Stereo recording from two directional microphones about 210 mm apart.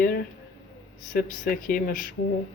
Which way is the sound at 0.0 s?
50° left (ahead or behind).